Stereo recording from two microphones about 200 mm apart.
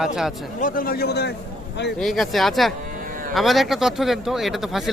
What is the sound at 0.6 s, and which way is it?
Speech, 45° left (ahead or behind).